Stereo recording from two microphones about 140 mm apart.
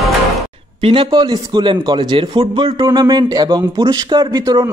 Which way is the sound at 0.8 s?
40° right (ahead or behind).